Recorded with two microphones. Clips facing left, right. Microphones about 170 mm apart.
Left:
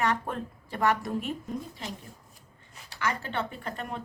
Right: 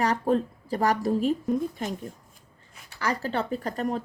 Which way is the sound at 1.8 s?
50° right (ahead or behind).